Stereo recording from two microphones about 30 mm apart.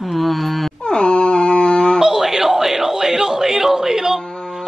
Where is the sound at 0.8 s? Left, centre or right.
Left.